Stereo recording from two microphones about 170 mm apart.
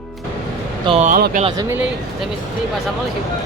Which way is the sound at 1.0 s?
55° right (ahead or behind).